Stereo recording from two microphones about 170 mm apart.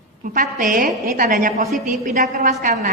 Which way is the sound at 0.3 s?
50° right (ahead or behind).